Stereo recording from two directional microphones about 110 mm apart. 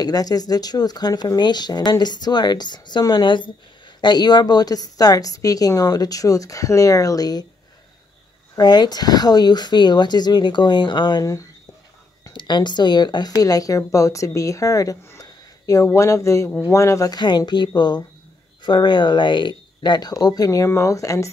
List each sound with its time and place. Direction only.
0.0 s speech: 35° left (ahead or behind)
8.5 s speech: 40° left (ahead or behind)
12.3 s speech: 45° left (ahead or behind)